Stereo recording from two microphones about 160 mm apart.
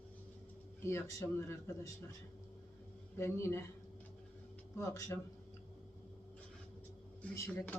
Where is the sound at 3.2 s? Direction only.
15° left (ahead or behind).